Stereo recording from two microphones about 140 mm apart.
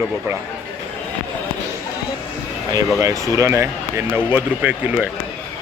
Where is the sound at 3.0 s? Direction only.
25° right (ahead or behind).